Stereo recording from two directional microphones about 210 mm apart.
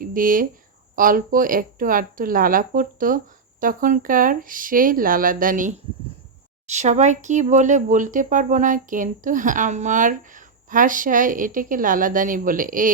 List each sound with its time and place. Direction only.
0.0 s speech: 40° right (ahead or behind)